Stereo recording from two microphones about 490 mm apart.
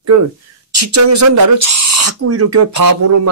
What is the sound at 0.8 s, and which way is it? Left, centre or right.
Speech, right.